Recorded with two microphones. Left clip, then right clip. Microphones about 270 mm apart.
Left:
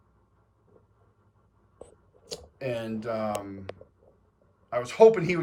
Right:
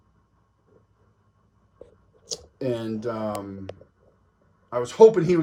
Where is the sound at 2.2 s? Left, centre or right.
Centre.